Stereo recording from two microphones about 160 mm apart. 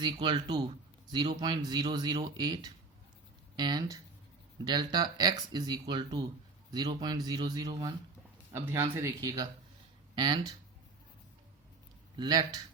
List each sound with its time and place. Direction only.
0.0 s speech: 30° right (ahead or behind)
12.1 s speech: 30° right (ahead or behind)